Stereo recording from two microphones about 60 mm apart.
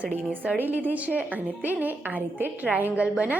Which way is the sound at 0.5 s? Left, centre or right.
Right.